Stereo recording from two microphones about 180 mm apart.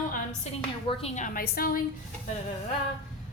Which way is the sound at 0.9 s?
35° left (ahead or behind).